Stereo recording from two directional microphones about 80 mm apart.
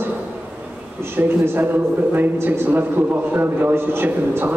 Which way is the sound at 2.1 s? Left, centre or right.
Right.